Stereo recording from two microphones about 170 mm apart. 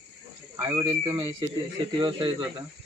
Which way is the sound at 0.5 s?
20° right (ahead or behind).